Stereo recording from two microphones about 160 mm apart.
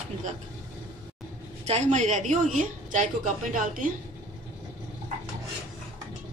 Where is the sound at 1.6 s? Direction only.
45° right (ahead or behind).